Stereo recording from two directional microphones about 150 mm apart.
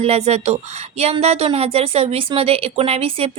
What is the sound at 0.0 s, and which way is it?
Speech, 45° right (ahead or behind).